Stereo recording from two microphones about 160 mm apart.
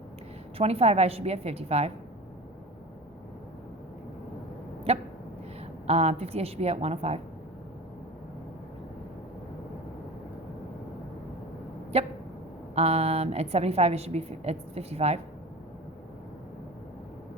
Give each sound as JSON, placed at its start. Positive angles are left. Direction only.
{"t": 0.6, "sound": "a woman's voice", "side_deg": -40}
{"t": 5.9, "sound": "a woman's voice", "side_deg": -40}
{"t": 12.7, "sound": "a woman's voice", "side_deg": -40}